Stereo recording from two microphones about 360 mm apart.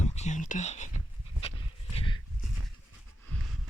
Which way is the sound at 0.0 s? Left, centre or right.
Centre.